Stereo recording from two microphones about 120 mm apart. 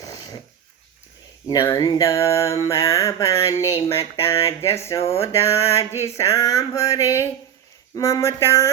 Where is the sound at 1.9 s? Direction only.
25° left (ahead or behind).